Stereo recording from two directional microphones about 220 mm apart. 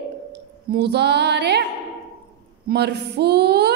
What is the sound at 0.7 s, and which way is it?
Speech, 50° right (ahead or behind).